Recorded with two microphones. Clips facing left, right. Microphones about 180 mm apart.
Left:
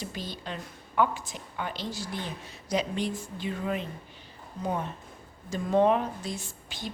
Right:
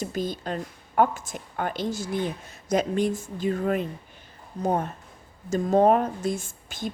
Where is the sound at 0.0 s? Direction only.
45° right (ahead or behind).